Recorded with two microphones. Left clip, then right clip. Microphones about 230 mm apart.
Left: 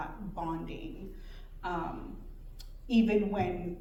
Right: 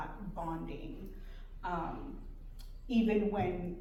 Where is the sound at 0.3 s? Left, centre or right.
Left.